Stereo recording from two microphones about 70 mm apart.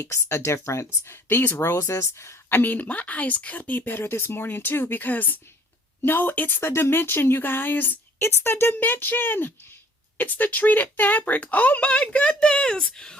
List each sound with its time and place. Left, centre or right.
0.0 s speech: left
6.6 s speech: left; by 13.1 s centre